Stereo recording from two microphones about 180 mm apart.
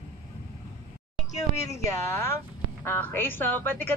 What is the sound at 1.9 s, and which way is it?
A woman's voice, 15° left (ahead or behind).